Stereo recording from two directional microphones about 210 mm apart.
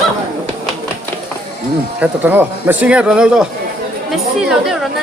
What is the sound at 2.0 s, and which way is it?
A woman's voice, 10° right (ahead or behind).